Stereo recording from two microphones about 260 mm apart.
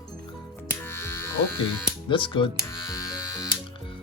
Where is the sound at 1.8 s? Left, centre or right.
Centre.